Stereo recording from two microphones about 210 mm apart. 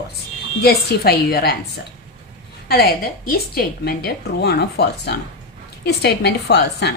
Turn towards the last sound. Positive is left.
turn(degrees=55)  # may be behind; listen again after turning